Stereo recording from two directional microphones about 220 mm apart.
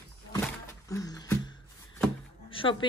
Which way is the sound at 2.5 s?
25° left (ahead or behind).